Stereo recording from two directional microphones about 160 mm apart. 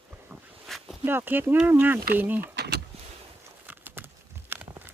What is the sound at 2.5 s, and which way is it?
Power windows, 90° right.